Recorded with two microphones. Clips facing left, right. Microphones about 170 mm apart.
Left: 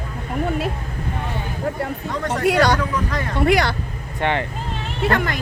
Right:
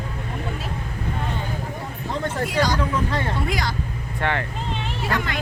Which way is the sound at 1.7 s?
70° left (ahead or behind).